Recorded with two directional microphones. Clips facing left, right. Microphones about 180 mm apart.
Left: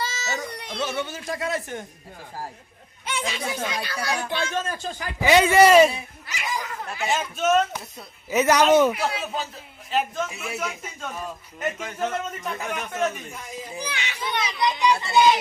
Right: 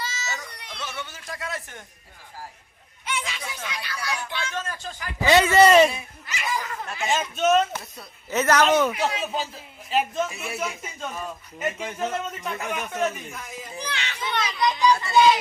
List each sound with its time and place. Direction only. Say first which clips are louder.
0.0 s speech: left 4 dB; 30° left (ahead or behind)
3.2 s speech: left 7 dB; 40° left (ahead or behind)
5.2 s a child's voice: left 1 dB; 15° left (ahead or behind); by 13.2 s 5° right (ahead or behind)
13.3 s a child's voice: left 2 dB; 10° left (ahead or behind)